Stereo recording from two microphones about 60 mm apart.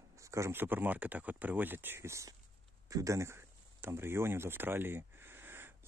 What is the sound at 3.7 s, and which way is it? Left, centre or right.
Speech, right.